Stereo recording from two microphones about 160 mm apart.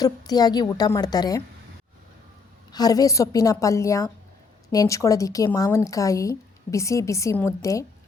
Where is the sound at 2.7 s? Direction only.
25° left (ahead or behind).